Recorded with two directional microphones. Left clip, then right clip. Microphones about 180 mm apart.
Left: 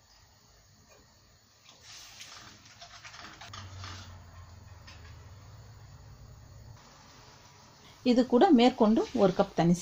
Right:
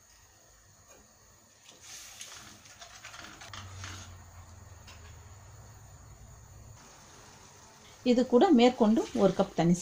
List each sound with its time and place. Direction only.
8.0 s speech: 30° left (ahead or behind)